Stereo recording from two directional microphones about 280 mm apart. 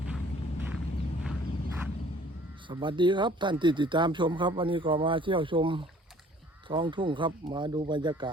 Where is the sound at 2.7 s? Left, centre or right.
Centre.